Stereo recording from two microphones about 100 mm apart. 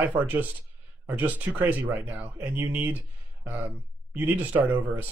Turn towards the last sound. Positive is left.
turn(degrees=-15)  # may be behind; listen again after turning